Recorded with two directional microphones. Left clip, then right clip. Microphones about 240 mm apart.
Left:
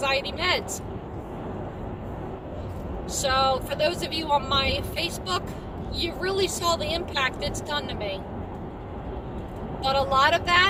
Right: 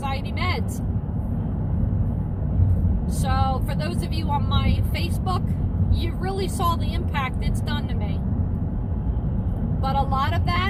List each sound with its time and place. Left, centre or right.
0.0 s vehicle: left
3.2 s speech: left
9.8 s speech: left